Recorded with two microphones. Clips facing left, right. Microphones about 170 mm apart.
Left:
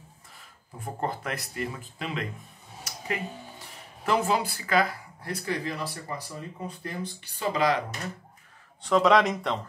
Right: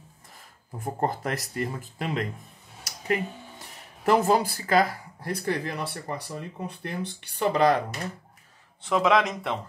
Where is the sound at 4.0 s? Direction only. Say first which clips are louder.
Right 4 dB; 45° right (ahead or behind).